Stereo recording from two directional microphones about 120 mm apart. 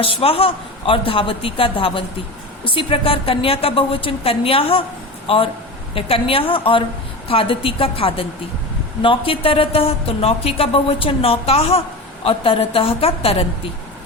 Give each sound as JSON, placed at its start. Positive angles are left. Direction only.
{"t": 0.0, "sound": "a woman's voice", "side_deg": 50}